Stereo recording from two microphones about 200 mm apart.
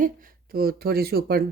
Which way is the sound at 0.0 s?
45° right (ahead or behind).